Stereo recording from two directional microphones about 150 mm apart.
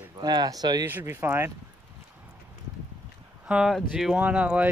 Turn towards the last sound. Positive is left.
turn(degrees=-10)  # may be behind; listen again after turning